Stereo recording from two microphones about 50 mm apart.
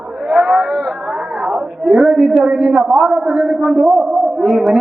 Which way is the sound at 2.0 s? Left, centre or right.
Centre.